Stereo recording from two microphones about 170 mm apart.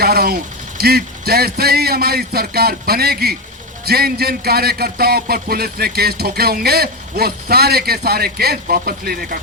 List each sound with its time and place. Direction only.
0.0 s vehicle: 65° right (ahead or behind)
0.8 s speech: 65° right (ahead or behind)